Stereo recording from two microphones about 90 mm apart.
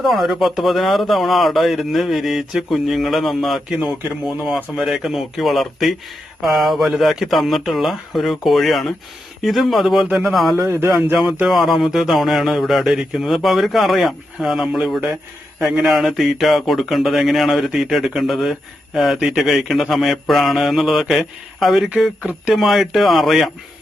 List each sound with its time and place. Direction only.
0.0 s a man's voice: centre (ahead or behind)
10.6 s speech: 25° right (ahead or behind)
10.9 s a man's voice: 5° right (ahead or behind)